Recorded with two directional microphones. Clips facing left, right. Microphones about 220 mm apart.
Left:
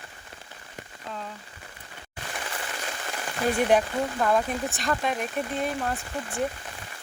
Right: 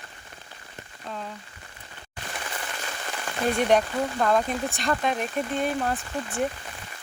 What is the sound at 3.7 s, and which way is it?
Speech, 5° left (ahead or behind).